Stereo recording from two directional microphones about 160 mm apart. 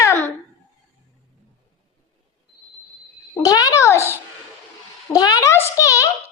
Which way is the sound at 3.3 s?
20° left (ahead or behind).